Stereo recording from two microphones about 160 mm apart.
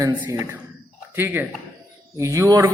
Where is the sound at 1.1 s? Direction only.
15° right (ahead or behind).